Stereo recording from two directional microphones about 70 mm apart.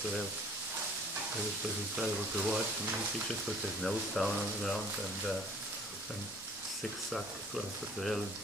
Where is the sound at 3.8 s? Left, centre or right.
Centre.